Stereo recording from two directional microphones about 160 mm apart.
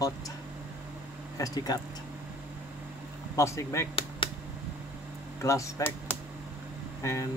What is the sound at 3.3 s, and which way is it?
Speech, 20° left (ahead or behind).